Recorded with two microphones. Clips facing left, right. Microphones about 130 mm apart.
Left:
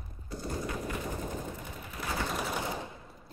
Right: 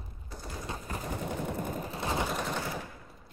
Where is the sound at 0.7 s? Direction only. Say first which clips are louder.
Left 3 dB; 35° right (ahead or behind).